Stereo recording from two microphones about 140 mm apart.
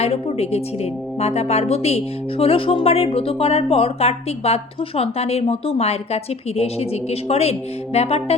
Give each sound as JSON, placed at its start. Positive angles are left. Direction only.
{"t": 0.0, "sound": "speech", "side_deg": 45}